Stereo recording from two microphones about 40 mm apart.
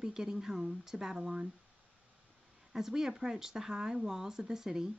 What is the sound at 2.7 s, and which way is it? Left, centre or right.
A woman's voice, centre.